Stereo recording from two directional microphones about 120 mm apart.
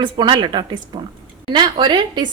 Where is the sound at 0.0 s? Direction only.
35° right (ahead or behind).